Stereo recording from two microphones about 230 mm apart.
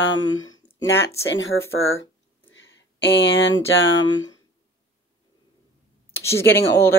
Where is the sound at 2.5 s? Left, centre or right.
Left.